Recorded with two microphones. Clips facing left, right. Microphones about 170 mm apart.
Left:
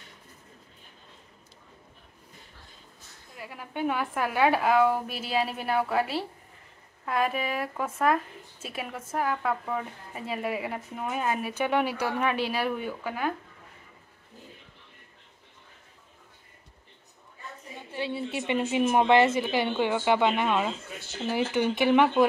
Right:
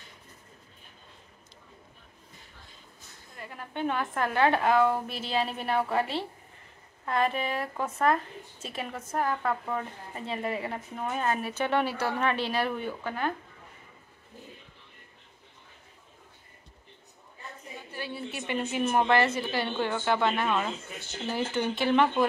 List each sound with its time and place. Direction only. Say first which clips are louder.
3.3 s speech: left 1 dB; 5° left (ahead or behind)
17.9 s speech: left 6 dB; 25° left (ahead or behind)